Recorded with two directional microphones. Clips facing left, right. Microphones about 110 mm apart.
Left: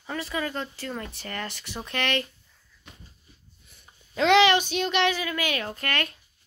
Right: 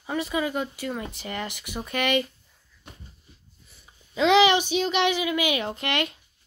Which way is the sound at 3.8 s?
5° right (ahead or behind).